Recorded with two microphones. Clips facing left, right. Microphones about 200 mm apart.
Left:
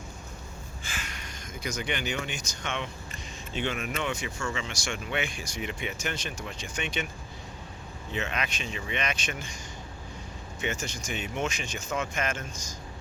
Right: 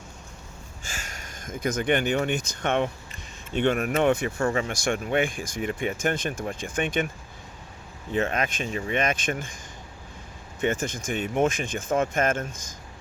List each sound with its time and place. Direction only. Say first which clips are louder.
0.9 s speech: right 1 dB; 45° right (ahead or behind)
8.1 s speech: right 7 dB; 50° right (ahead or behind)
10.6 s speech: right 7 dB; 55° right (ahead or behind)